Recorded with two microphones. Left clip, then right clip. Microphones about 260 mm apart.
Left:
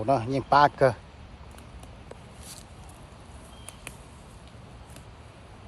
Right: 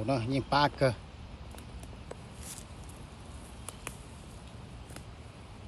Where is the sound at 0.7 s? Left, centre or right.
Left.